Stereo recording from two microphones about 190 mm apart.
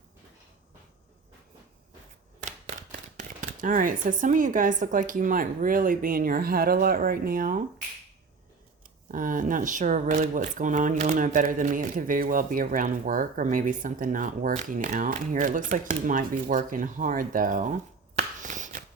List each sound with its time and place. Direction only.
3.2 s speech: 45° right (ahead or behind)
9.1 s speech: 45° right (ahead or behind)
18.2 s a sound: 40° right (ahead or behind)